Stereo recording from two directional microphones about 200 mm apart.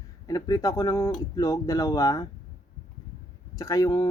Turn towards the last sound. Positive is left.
turn(degrees=20)  # may be behind; listen again after turning